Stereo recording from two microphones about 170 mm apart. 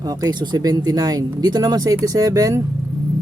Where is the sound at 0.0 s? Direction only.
20° right (ahead or behind).